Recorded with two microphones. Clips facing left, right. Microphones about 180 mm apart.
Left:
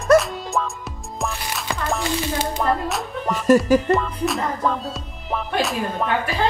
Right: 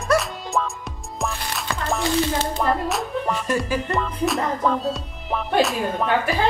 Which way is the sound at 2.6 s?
Centre (ahead or behind).